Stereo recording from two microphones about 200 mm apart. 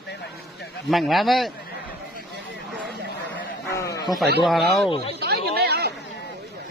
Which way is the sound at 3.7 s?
15° left (ahead or behind).